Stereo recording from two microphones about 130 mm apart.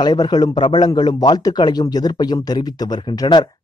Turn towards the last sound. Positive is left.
turn(degrees=35)  # may be behind; listen again after turning